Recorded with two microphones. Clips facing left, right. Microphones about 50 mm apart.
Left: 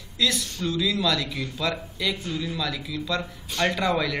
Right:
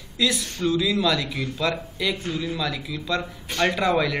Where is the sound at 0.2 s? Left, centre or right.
Centre.